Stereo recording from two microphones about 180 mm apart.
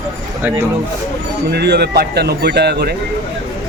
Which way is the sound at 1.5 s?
65° right (ahead or behind).